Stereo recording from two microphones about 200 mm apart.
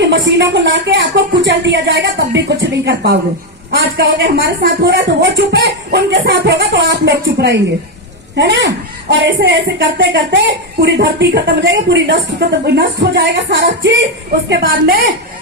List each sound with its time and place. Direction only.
0.0 s a woman's voice: 60° right (ahead or behind)